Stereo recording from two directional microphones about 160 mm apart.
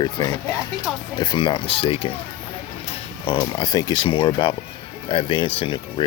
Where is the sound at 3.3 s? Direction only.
25° left (ahead or behind).